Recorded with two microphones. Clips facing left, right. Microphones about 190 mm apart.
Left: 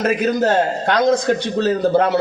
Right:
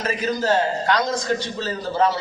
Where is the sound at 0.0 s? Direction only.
55° left (ahead or behind).